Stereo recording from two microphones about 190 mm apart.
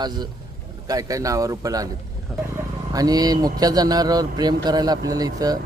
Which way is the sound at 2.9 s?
20° right (ahead or behind).